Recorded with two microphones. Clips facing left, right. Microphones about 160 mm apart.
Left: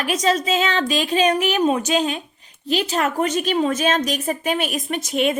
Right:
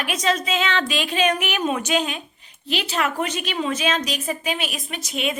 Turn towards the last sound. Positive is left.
turn(degrees=50)  # may be behind; listen again after turning